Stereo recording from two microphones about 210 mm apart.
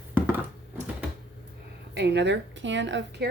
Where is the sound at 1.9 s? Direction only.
55° right (ahead or behind).